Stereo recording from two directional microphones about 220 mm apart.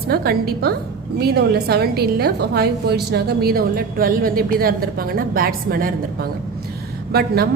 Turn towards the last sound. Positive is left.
turn(degrees=-45)  # may be behind; listen again after turning